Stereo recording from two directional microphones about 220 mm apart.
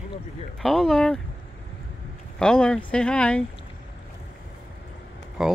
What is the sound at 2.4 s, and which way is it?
Speech, 5° left (ahead or behind).